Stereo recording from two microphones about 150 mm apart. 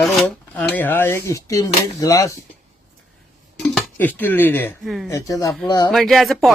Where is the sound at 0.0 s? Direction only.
Centre (ahead or behind); by 2.3 s 20° left (ahead or behind).